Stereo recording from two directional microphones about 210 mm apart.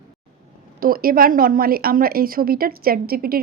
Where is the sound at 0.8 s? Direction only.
45° right (ahead or behind).